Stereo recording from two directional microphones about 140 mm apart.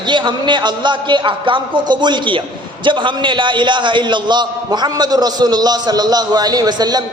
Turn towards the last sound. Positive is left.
turn(degrees=-30)  # may be behind; listen again after turning